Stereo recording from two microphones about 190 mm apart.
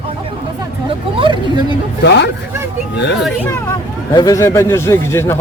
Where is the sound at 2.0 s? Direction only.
65° left (ahead or behind).